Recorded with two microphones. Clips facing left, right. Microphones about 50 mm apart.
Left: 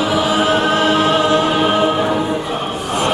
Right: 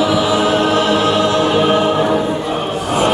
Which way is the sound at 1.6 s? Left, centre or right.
Centre.